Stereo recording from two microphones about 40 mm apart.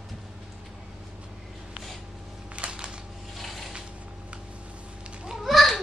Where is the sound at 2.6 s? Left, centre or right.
Right.